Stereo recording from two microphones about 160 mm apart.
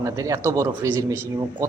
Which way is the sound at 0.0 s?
20° right (ahead or behind).